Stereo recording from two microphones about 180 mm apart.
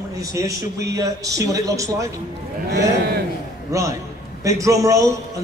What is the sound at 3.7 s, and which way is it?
A man's voice, 15° right (ahead or behind).